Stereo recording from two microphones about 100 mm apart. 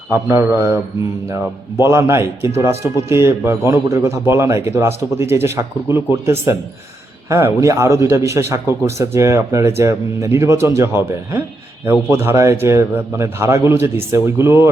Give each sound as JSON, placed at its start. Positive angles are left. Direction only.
{"t": 0.1, "sound": "a man's voice", "side_deg": -25}
{"t": 1.8, "sound": "a man's voice", "side_deg": -25}
{"t": 12.0, "sound": "a man's voice", "side_deg": -25}